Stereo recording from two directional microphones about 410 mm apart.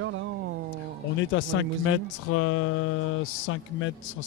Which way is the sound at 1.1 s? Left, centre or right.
Left.